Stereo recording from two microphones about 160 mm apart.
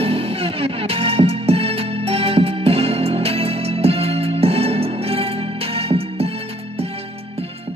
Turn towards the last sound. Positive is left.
turn(degrees=-35)  # may be behind; listen again after turning